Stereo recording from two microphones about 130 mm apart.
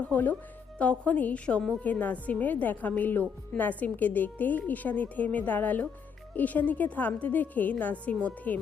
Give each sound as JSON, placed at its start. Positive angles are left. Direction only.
{"t": 0.0, "sound": "a woman's voice", "side_deg": 10}